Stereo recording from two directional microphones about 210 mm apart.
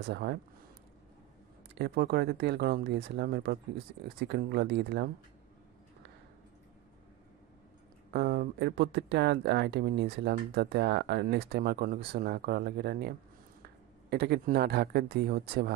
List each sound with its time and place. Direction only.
0.0 s speech: 50° right (ahead or behind)
1.8 s speech: 50° right (ahead or behind)
8.1 s speech: 50° right (ahead or behind)